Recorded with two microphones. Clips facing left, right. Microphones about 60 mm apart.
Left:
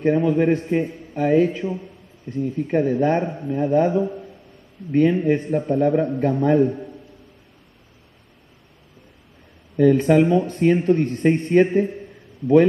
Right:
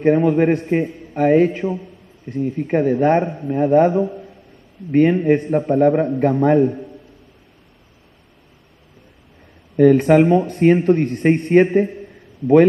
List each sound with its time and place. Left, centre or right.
0.0 s a man's voice: right
9.8 s a man's voice: right